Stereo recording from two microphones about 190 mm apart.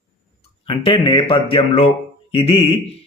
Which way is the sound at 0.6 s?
30° left (ahead or behind).